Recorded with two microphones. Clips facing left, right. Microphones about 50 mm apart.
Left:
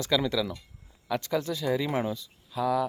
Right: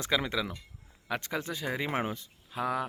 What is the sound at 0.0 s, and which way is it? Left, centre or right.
Speech, right.